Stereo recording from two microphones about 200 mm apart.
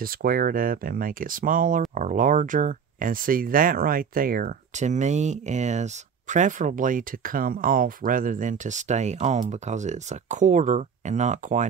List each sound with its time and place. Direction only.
0.0 s speech: 45° right (ahead or behind)